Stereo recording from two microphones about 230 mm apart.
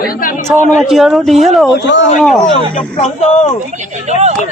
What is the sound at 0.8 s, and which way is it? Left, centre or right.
A man's voice, centre.